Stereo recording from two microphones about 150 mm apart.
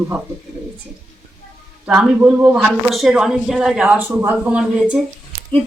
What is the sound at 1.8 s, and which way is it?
Speech, 10° right (ahead or behind).